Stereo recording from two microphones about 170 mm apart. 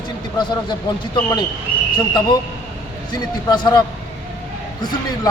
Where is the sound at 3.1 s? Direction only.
25° left (ahead or behind).